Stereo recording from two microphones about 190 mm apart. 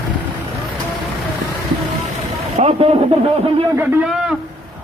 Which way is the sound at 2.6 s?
30° right (ahead or behind).